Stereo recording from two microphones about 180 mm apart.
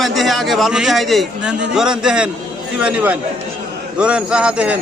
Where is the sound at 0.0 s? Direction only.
Centre (ahead or behind).